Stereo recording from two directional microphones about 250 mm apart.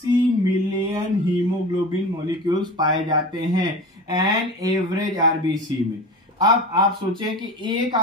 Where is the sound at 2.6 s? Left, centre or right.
Centre.